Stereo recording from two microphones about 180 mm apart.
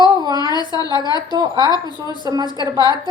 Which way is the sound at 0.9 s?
20° left (ahead or behind).